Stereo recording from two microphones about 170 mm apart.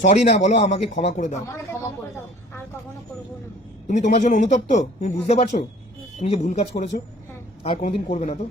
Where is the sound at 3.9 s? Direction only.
45° left (ahead or behind).